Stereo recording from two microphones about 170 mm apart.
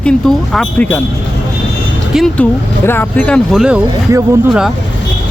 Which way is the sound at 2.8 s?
10° left (ahead or behind).